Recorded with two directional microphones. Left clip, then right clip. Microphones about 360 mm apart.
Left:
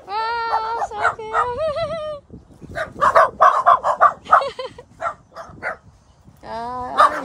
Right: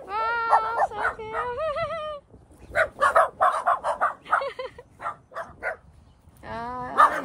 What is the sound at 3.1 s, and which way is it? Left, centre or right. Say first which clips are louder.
Crow: left 12 dB; centre.